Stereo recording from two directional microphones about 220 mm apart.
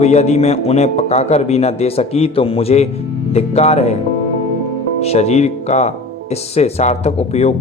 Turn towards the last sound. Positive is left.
turn(degrees=30)  # may be behind; listen again after turning